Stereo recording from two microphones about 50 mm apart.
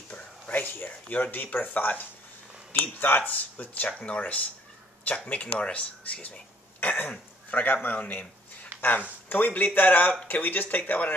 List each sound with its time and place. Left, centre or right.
0.5 s speech: left
6.8 s cough: left
7.5 s speech: left
9.3 s speech: left